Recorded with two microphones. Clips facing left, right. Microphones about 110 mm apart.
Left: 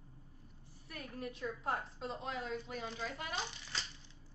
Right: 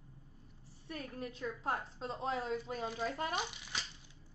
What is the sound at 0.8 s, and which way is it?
A woman's voice, 30° right (ahead or behind).